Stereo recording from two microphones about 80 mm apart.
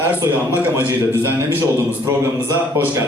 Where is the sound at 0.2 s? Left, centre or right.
Right.